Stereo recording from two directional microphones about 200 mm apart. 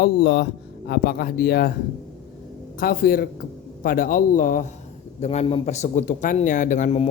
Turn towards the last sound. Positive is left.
turn(degrees=35)  # may be behind; listen again after turning